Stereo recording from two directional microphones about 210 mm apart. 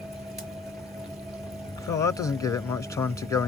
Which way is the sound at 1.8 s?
15° left (ahead or behind).